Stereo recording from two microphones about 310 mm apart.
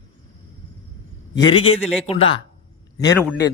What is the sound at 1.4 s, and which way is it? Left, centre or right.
Speech, centre.